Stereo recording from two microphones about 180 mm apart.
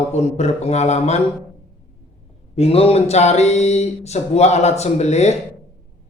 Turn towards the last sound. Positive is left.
turn(degrees=35)  # may be behind; listen again after turning